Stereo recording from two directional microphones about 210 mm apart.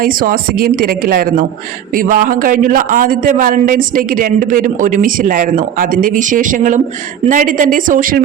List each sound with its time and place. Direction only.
0.0 s a man's voice: 40° right (ahead or behind)